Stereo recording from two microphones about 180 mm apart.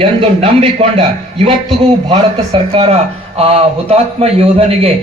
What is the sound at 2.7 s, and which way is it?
Speech, 35° right (ahead or behind).